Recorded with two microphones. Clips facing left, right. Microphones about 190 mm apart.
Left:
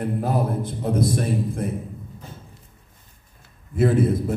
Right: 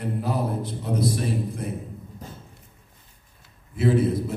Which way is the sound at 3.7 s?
50° left (ahead or behind).